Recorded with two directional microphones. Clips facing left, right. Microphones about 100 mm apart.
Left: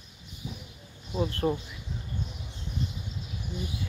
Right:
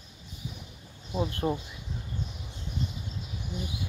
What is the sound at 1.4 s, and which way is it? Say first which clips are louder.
Speech: left 2 dB; centre (ahead or behind).